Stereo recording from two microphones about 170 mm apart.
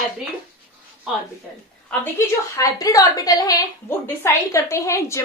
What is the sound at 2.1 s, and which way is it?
A woman's voice, 20° left (ahead or behind).